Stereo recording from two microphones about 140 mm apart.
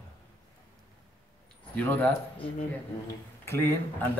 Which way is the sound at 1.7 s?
10° left (ahead or behind).